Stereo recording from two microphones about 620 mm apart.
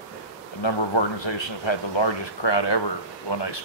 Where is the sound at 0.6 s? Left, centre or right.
Left.